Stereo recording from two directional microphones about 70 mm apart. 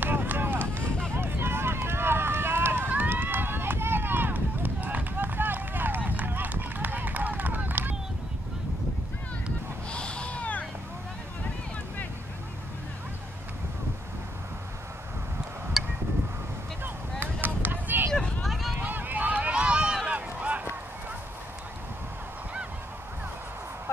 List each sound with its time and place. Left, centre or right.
0.0 s run: right
9.8 s a sound: centre
15.8 s a sound: centre
16.8 s vehicle: right
18.4 s run: centre
18.8 s run: right